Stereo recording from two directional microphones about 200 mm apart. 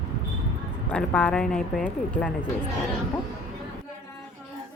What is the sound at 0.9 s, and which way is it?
Speech, 5° left (ahead or behind).